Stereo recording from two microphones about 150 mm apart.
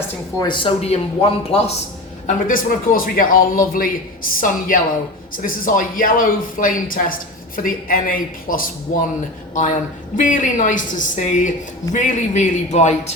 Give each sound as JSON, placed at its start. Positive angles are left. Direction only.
{"t": 0.3, "sound": "speech", "side_deg": 30}
{"t": 2.2, "sound": "speech", "side_deg": 70}
{"t": 10.2, "sound": "a woman's voice", "side_deg": 60}